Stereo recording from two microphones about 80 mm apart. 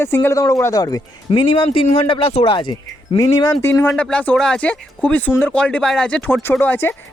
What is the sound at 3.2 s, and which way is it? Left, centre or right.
Speech, left.